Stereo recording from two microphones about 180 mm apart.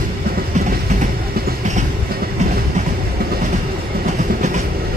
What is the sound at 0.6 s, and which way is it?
Train, 40° right (ahead or behind).